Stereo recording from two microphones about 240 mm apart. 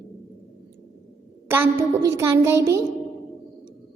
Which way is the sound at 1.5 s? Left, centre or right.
Centre.